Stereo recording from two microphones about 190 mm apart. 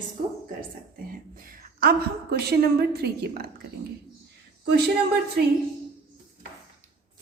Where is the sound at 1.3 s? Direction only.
50° right (ahead or behind).